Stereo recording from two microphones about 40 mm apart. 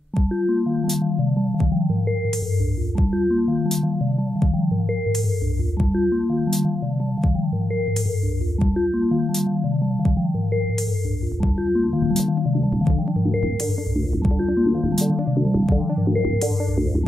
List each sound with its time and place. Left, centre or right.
0.1 s music: centre
8.5 s music: centre
11.4 s music: centre